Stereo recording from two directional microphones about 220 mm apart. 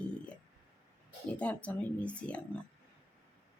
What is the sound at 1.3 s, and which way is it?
Speech, 5° left (ahead or behind).